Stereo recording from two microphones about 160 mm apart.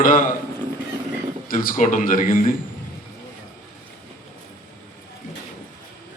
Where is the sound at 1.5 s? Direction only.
60° left (ahead or behind).